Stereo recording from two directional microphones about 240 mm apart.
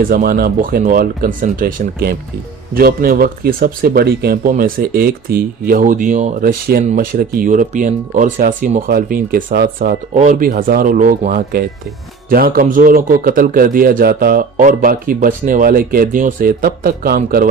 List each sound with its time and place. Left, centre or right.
0.0 s speech: right